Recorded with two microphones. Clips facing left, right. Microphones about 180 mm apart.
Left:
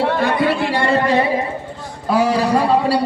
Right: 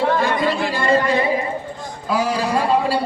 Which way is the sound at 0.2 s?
65° left (ahead or behind).